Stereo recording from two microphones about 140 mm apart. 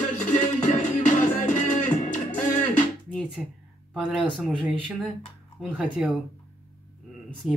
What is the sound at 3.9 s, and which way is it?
Speech, 5° right (ahead or behind).